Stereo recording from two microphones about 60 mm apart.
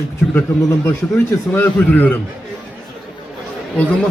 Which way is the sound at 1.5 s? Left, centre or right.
Left.